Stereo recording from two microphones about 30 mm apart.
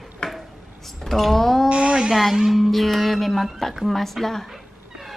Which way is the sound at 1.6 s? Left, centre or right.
Right.